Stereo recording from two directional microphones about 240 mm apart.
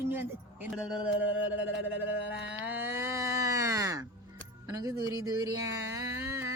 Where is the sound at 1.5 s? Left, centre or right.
Left.